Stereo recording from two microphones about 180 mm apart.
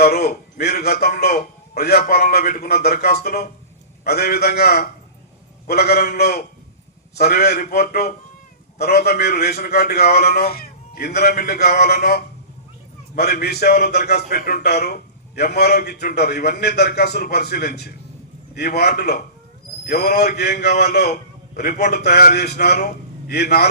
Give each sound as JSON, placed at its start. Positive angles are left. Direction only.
{"t": 0.0, "sound": "a man's voice", "side_deg": 60}